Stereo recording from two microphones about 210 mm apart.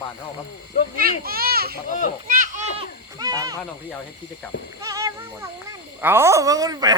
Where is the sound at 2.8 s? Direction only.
15° right (ahead or behind).